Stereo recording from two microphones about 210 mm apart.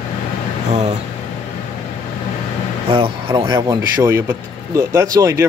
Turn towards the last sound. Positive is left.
turn(degrees=-15)  # may be behind; listen again after turning